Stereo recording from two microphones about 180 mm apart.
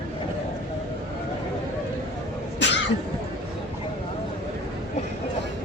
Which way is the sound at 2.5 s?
75° left (ahead or behind).